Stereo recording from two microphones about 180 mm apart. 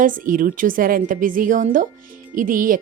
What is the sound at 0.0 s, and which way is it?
Speech, 50° right (ahead or behind).